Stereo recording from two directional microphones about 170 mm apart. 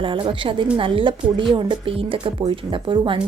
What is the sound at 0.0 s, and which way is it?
Speech, 30° right (ahead or behind).